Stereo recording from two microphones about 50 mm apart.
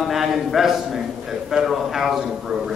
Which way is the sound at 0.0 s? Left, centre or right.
Centre.